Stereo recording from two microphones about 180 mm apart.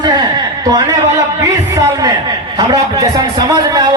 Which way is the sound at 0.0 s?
25° right (ahead or behind).